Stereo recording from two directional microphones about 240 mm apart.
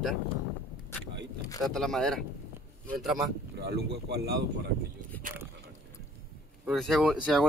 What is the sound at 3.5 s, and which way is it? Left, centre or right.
Speech, right.